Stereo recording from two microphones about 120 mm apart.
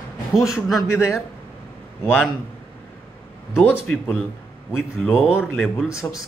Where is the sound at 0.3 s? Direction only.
Centre (ahead or behind).